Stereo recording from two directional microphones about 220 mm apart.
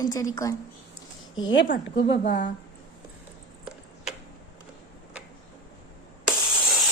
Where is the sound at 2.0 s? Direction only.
50° left (ahead or behind).